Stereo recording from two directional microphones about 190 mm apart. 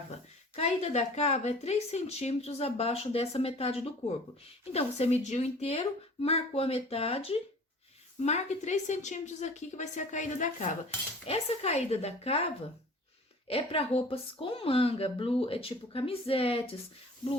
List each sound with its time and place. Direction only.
0.1 s a woman's voice: 35° left (ahead or behind)
13.5 s a woman's voice: 30° left (ahead or behind)